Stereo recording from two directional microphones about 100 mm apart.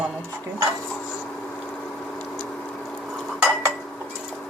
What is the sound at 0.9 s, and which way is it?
Dishes, centre (ahead or behind).